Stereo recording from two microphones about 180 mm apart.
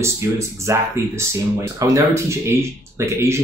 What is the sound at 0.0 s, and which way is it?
Speech, 15° right (ahead or behind).